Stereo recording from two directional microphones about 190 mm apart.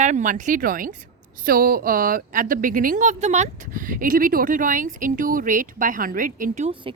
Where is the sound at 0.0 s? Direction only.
40° right (ahead or behind).